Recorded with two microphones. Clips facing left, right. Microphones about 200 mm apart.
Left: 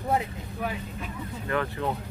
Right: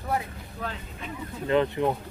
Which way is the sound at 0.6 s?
10° left (ahead or behind).